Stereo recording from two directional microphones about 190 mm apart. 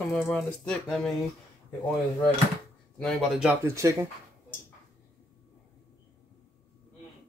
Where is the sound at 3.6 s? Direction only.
15° right (ahead or behind).